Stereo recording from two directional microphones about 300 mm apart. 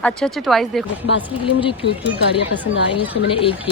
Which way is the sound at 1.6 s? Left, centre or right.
Centre.